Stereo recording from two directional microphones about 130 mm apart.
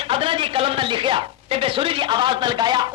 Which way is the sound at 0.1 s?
40° right (ahead or behind).